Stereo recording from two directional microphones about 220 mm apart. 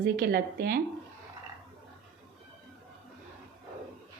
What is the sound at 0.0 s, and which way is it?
Speech, 45° right (ahead or behind).